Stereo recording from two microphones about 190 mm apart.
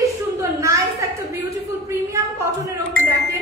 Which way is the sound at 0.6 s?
15° right (ahead or behind).